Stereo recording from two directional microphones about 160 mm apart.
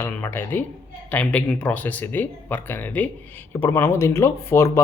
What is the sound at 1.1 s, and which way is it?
Speech, 10° left (ahead or behind).